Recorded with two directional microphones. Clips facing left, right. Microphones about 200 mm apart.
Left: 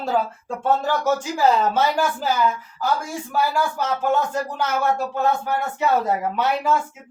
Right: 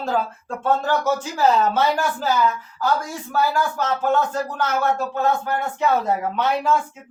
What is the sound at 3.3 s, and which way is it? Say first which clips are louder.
Speech: right 1 dB; 10° left (ahead or behind).